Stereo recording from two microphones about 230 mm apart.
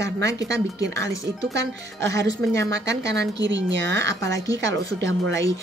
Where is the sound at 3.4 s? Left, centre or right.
Right.